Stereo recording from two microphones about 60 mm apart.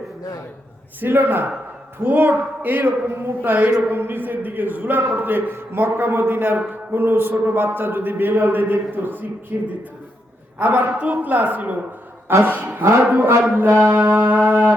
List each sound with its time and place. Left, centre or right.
1.0 s a man's voice: right
10.6 s a man's voice: right
12.6 s a man's voice: right
13.0 s a man's voice: right